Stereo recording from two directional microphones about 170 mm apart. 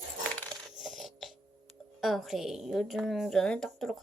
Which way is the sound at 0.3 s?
Centre (ahead or behind).